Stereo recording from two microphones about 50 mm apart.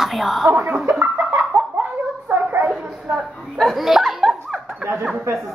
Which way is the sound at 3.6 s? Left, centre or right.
Centre.